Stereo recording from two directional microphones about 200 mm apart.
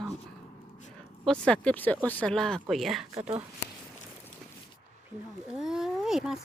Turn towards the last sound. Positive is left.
turn(degrees=0)  # may be behind; listen again after turning